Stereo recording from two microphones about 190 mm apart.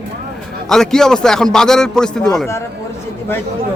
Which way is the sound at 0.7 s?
5° left (ahead or behind).